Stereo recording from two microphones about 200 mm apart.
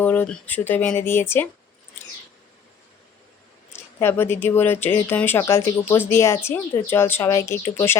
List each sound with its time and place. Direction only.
0.0 s speech: 10° left (ahead or behind)
3.7 s speech: 10° left (ahead or behind)